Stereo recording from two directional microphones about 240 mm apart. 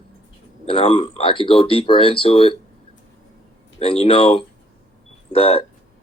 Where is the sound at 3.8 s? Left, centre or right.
Left.